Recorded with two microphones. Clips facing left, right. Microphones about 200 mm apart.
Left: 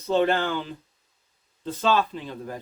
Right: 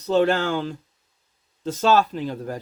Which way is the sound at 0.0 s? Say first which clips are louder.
Right 3 dB; 85° right.